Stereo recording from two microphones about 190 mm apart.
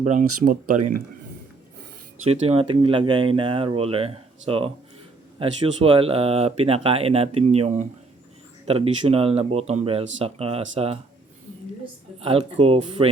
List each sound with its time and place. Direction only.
0.0 s speech: 40° right (ahead or behind)
2.2 s speech: 30° right (ahead or behind)
12.2 s speech: 30° right (ahead or behind)